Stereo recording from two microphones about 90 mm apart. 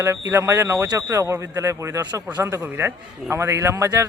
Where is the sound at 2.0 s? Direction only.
50° right (ahead or behind).